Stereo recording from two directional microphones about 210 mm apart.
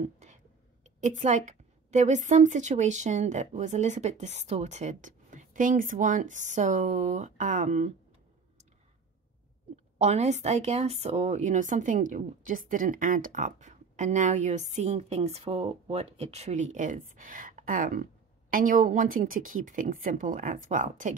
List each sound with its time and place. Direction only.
0.0 s whispering: 35° right (ahead or behind)
1.0 s speech: 35° right (ahead or behind)
9.9 s speech: 30° right (ahead or behind)